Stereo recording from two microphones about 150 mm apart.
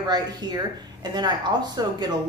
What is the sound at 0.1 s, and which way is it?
Speech, 30° right (ahead or behind).